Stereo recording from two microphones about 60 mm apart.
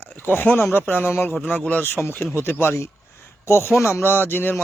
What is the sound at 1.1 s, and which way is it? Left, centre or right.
Speech, left.